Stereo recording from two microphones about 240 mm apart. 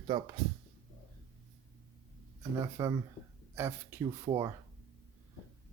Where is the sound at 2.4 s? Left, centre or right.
Centre.